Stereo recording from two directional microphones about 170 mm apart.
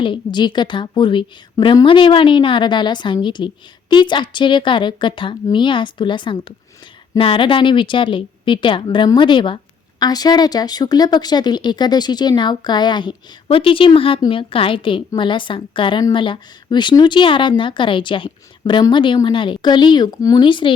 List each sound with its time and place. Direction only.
0.0 s speech: 25° left (ahead or behind)